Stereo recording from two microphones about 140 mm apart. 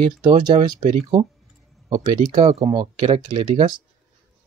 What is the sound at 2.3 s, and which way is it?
Speech, 40° right (ahead or behind).